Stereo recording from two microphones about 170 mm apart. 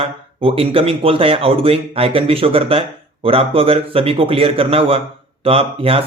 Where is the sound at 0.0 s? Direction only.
35° right (ahead or behind).